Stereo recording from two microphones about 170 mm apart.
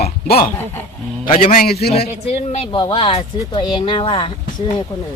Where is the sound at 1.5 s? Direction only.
65° left (ahead or behind).